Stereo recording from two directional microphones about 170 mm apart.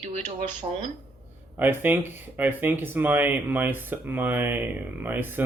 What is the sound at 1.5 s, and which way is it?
Speech, 10° right (ahead or behind).